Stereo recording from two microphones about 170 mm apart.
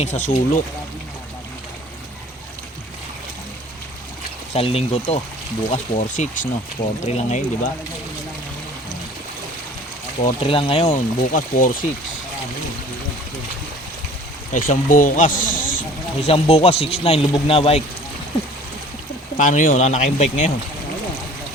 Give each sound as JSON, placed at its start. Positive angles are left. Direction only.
{"t": 0.0, "sound": "speech", "side_deg": 45}
{"t": 4.5, "sound": "speech", "side_deg": 35}
{"t": 10.4, "sound": "speech", "side_deg": 30}
{"t": 10.9, "sound": "speech", "side_deg": 50}
{"t": 14.5, "sound": "speech", "side_deg": 50}
{"t": 16.2, "sound": "speech", "side_deg": 35}
{"t": 19.4, "sound": "speech", "side_deg": 50}